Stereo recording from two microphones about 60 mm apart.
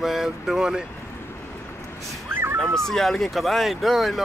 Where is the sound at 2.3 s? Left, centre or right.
Right.